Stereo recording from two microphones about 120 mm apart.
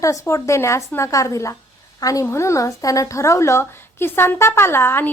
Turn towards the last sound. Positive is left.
turn(degrees=20)  # may be behind; listen again after turning